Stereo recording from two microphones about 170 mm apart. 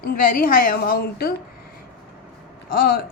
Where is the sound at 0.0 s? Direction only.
60° left (ahead or behind).